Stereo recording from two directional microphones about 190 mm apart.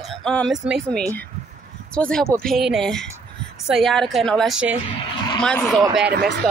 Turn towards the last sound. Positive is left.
turn(degrees=-60)  # may be behind; listen again after turning